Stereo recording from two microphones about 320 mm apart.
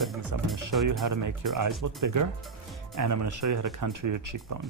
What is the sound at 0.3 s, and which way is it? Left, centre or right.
Music, right.